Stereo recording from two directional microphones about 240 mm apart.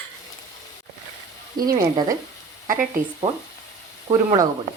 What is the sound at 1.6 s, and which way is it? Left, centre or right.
Speech, centre.